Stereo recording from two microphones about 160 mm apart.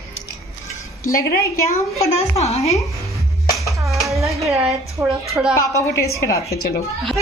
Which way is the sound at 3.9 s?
Centre (ahead or behind).